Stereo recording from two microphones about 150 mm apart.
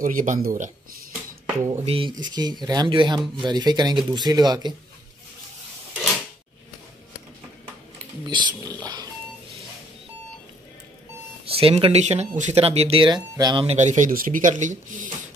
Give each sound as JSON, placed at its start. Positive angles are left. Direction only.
{"t": 0.0, "sound": "speech", "side_deg": -60}
{"t": 1.7, "sound": "speech", "side_deg": -35}
{"t": 8.3, "sound": "speech", "side_deg": -30}
{"t": 8.8, "sound": "dog", "side_deg": -25}
{"t": 11.4, "sound": "speech", "side_deg": -40}
{"t": 13.7, "sound": "speech", "side_deg": -50}